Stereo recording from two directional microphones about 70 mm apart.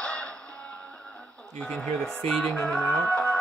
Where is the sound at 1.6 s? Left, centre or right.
Centre.